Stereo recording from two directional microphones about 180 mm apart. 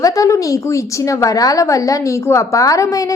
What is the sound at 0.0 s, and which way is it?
A woman's voice, 20° left (ahead or behind).